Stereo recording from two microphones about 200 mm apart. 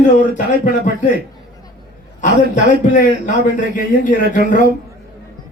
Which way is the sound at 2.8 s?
40° left (ahead or behind).